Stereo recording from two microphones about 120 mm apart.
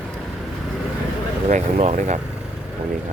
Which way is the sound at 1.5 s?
75° right (ahead or behind).